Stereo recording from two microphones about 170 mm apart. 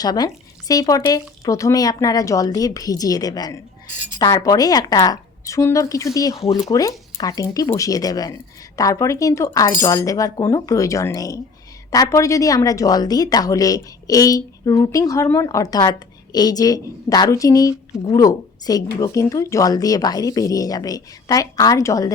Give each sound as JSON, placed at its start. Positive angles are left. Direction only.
{"t": 0.0, "sound": "a woman's voice", "side_deg": 25}